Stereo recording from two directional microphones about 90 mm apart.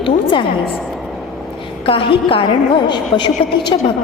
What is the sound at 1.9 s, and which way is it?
Speech, 80° left.